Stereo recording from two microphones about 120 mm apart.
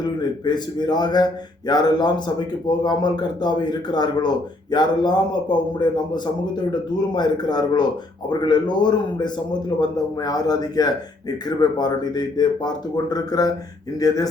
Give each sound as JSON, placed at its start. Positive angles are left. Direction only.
{"t": 0.0, "sound": "speech", "side_deg": 35}